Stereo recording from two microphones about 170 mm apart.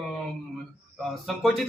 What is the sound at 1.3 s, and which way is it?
Speech, centre (ahead or behind).